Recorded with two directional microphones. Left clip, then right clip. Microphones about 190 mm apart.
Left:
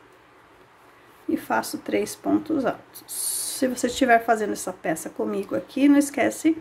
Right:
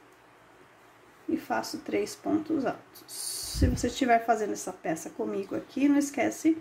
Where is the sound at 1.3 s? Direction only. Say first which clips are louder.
Left 6 dB; 15° left (ahead or behind).